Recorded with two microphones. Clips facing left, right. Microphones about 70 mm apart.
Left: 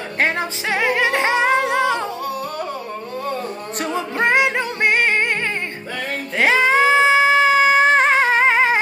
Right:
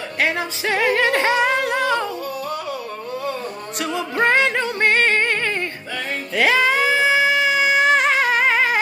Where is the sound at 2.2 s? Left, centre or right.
Left.